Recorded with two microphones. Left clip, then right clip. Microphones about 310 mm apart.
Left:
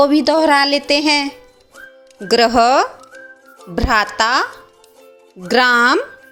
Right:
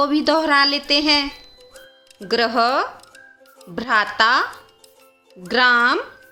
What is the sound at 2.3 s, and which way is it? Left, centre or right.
Speech, centre.